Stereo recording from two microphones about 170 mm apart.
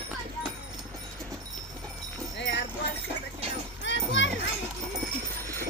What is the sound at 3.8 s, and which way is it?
Children playing, 90° left.